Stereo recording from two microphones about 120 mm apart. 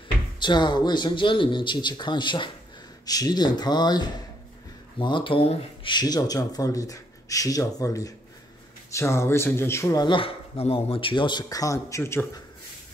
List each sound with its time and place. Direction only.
0.4 s speech: 40° left (ahead or behind); by 12.3 s 20° left (ahead or behind)